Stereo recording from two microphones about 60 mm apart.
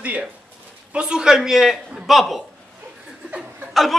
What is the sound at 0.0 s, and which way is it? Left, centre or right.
A man's voice, right.